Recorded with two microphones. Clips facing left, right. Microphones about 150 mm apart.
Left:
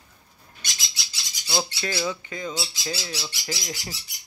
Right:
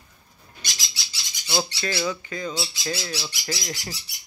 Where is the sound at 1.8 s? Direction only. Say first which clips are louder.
Right 1 dB; 10° left (ahead or behind).